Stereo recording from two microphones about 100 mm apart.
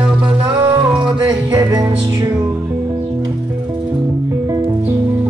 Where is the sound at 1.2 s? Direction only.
35° right (ahead or behind).